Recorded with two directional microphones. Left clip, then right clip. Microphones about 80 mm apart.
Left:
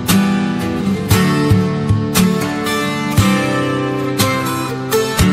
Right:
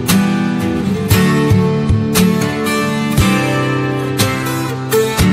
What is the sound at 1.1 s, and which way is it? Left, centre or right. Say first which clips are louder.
Music: right 1 dB; left.